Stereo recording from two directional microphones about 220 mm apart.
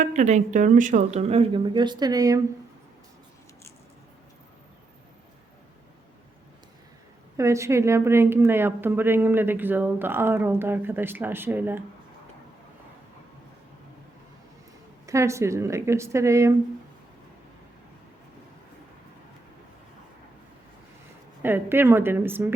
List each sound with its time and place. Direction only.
0.0 s speech: 35° right (ahead or behind); by 2.4 s 15° right (ahead or behind)
7.3 s a woman's voice: 15° right (ahead or behind)
15.0 s a woman's voice: 15° right (ahead or behind)
21.4 s a woman's voice: 10° right (ahead or behind)